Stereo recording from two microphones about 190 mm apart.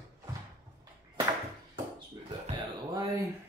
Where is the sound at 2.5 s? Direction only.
20° right (ahead or behind).